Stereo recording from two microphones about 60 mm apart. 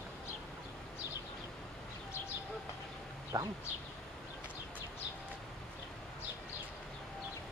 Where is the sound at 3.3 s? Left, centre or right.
Right.